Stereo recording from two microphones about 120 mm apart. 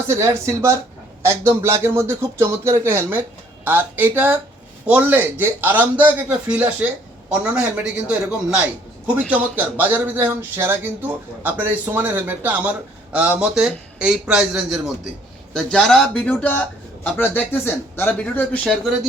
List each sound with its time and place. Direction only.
0.1 s a man's voice: 25° right (ahead or behind); by 18.6 s 10° left (ahead or behind)